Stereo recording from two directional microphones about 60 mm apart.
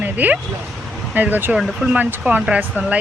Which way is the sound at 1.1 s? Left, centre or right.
Right.